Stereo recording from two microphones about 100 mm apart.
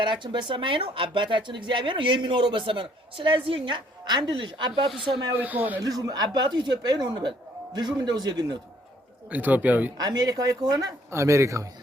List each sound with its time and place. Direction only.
0.0 s speech: 50° right (ahead or behind)
4.0 s speech: 45° right (ahead or behind)
5.4 s speech: 15° right (ahead or behind)
5.8 s speech: 40° right (ahead or behind)
9.3 s speech: 15° right (ahead or behind)
10.0 s speech: 40° right (ahead or behind)